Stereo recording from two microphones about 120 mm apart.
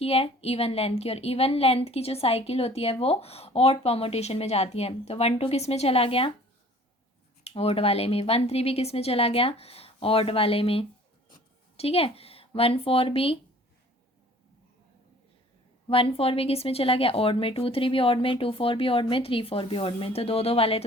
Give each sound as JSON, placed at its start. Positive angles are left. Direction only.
{"t": 0.0, "sound": "a woman's voice", "side_deg": 55}
{"t": 7.4, "sound": "a woman's voice", "side_deg": 55}
{"t": 15.9, "sound": "speech", "side_deg": 50}